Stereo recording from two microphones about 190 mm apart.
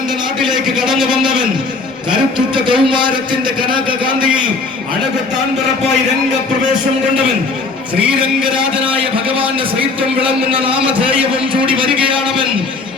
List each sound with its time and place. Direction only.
0.8 s a man's voice: centre (ahead or behind)
1.1 s a man's voice: 25° right (ahead or behind)
2.6 s a man's voice: 25° right (ahead or behind)
10.0 s a man's voice: 25° right (ahead or behind)